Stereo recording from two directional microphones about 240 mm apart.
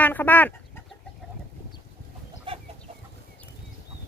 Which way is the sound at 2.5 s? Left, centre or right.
Right.